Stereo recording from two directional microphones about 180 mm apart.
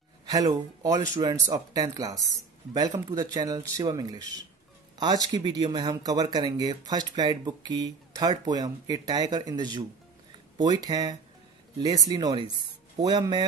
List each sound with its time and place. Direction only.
0.3 s speech: 20° right (ahead or behind)